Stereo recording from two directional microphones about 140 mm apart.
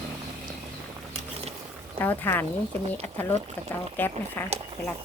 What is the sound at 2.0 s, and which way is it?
Speech, 15° left (ahead or behind).